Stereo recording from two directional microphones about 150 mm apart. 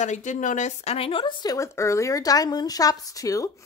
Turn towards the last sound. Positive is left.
turn(degrees=25)  # may be behind; listen again after turning